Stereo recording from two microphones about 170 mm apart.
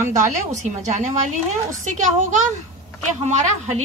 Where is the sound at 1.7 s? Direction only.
45° right (ahead or behind).